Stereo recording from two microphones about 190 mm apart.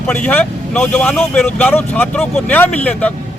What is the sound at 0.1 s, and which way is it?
Speech, 5° left (ahead or behind).